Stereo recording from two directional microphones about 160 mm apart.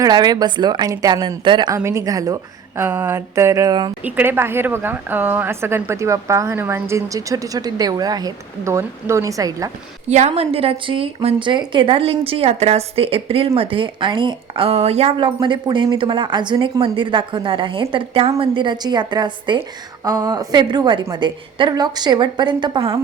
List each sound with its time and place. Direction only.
0.0 s a woman's voice: 25° right (ahead or behind)
4.0 s a woman's voice: 10° right (ahead or behind)
10.1 s a woman's voice: 45° right (ahead or behind)